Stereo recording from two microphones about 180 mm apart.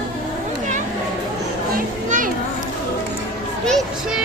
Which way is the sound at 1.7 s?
45° right (ahead or behind).